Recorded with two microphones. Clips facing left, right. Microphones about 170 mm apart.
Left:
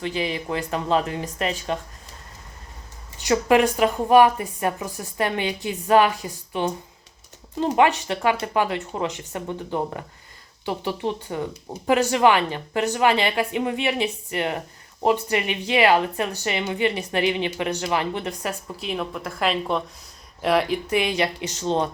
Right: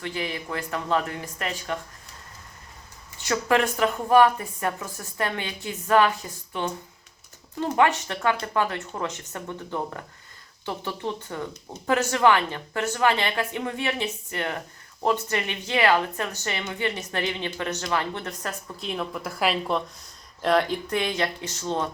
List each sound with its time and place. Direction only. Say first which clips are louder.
0.0 s speech: left 5 dB; 20° left (ahead or behind)
3.2 s a woman's voice: left 5 dB; 20° left (ahead or behind)
7.8 s a woman's voice: left 2 dB; 15° left (ahead or behind)